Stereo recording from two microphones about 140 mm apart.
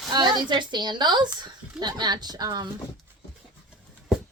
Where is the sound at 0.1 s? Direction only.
30° right (ahead or behind).